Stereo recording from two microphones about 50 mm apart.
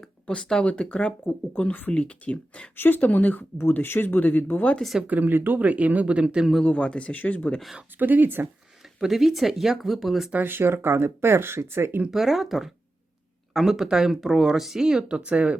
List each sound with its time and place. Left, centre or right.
0.3 s speech: centre
2.7 s speech: left
5.0 s speech: right
5.6 s speech: right
6.7 s speech: left
7.9 s speech: right
9.0 s speech: centre
10.3 s speech: right
12.1 s speech: centre
15.1 s speech: right